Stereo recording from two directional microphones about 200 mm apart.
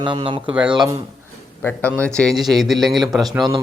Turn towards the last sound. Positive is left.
turn(degrees=0)  # may be behind; listen again after turning